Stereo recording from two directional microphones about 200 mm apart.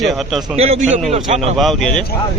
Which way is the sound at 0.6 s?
30° right (ahead or behind).